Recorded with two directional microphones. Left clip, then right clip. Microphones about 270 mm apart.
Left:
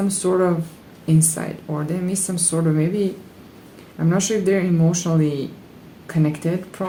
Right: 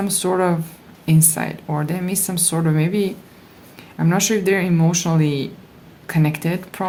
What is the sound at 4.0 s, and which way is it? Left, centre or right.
Speech, right.